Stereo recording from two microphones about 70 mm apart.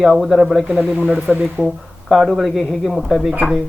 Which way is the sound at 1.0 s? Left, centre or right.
Centre.